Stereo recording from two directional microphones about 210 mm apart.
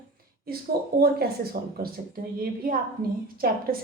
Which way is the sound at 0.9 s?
45° right (ahead or behind).